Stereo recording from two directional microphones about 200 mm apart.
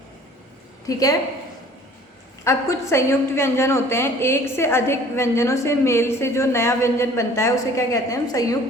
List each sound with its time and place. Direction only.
0.9 s a woman's voice: 15° left (ahead or behind)
2.4 s a woman's voice: 15° left (ahead or behind)